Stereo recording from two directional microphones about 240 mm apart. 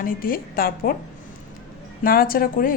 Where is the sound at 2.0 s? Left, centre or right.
Left.